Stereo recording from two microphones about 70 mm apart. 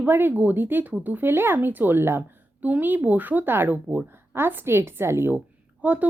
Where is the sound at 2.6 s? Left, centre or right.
Right.